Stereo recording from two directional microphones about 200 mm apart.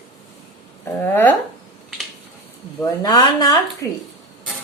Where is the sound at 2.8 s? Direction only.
20° left (ahead or behind).